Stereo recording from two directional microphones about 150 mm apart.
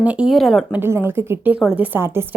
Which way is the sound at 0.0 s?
10° right (ahead or behind).